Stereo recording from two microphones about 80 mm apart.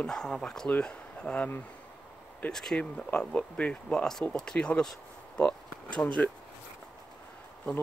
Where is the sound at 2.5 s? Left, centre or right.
Centre.